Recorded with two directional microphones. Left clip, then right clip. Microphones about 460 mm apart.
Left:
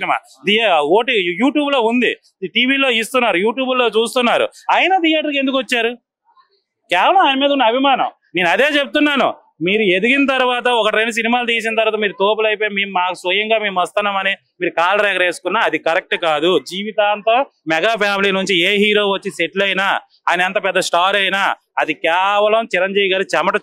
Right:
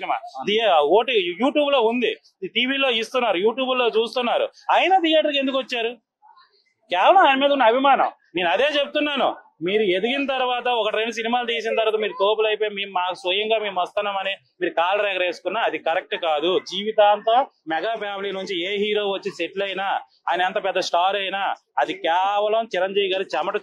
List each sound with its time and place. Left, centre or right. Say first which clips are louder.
0.0 s a man's voice: left 7 dB; left